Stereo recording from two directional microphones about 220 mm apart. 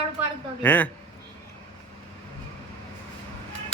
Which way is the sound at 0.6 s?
5° left (ahead or behind).